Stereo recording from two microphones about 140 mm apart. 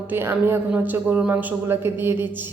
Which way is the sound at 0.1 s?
15° right (ahead or behind).